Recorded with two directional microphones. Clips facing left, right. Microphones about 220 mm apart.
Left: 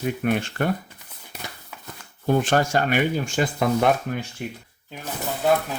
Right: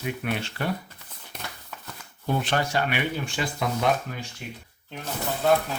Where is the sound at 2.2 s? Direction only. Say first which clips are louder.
Left 6 dB; 45° left (ahead or behind).